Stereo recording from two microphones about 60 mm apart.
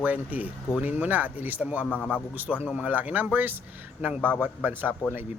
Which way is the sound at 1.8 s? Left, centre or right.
Left.